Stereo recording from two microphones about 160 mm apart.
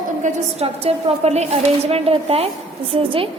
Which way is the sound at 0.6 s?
40° right (ahead or behind).